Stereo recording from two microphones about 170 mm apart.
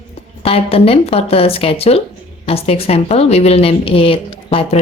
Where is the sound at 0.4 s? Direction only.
35° left (ahead or behind).